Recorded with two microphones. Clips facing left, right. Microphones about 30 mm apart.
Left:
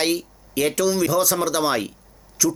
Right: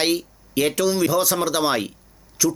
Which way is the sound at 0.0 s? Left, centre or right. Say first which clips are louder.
Right 1 dB; centre.